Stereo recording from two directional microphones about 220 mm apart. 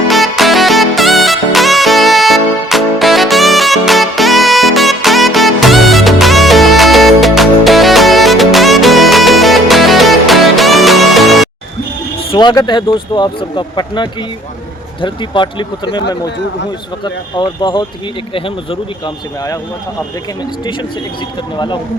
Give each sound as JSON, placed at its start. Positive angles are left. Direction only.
{"t": 0.1, "sound": "music", "side_deg": 0}
{"t": 12.3, "sound": "speech", "side_deg": 20}
{"t": 20.7, "sound": "speech", "side_deg": 20}